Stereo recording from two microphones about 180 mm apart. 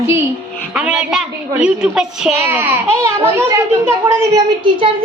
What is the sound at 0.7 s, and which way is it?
A woman's voice, 5° right (ahead or behind).